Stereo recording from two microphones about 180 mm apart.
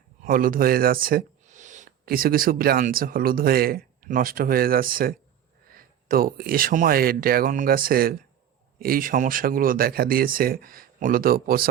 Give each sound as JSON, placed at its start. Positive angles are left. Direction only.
{"t": 0.2, "sound": "speech", "side_deg": -50}